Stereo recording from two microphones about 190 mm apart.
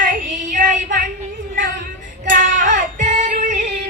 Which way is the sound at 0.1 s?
40° right (ahead or behind).